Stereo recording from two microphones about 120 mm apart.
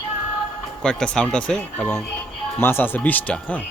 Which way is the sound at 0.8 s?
5° left (ahead or behind).